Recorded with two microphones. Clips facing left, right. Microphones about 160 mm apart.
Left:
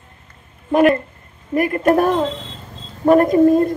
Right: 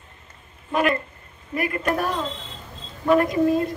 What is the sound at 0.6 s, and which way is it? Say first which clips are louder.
A man's voice: left 8 dB; 45° left (ahead or behind).